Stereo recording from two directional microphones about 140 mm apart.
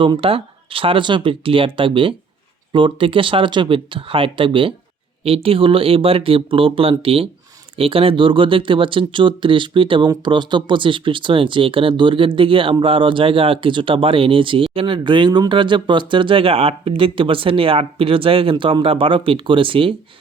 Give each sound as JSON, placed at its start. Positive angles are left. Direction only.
{"t": 0.0, "sound": "speech", "side_deg": -40}